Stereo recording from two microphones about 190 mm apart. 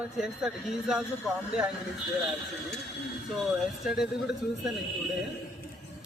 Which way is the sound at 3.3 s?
Centre (ahead or behind).